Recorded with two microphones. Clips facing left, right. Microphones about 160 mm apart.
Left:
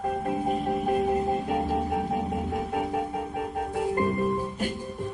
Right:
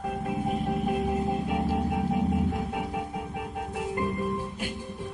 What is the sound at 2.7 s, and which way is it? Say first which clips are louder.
Music: left 4 dB; 45° left (ahead or behind).